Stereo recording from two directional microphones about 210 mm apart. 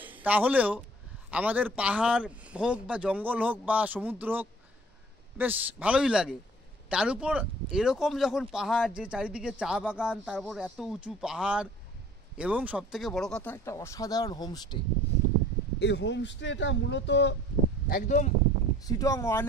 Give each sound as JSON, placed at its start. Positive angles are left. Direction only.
{"t": 0.0, "sound": "speech", "side_deg": -10}
{"t": 15.8, "sound": "speech", "side_deg": 55}
{"t": 17.8, "sound": "speech", "side_deg": 40}
{"t": 18.9, "sound": "speech", "side_deg": 15}